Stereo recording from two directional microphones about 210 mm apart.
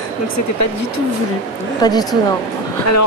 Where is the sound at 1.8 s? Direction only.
20° left (ahead or behind).